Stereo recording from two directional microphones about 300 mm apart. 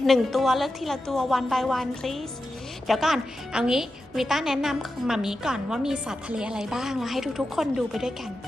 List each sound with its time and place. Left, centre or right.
0.0 s a woman's voice: centre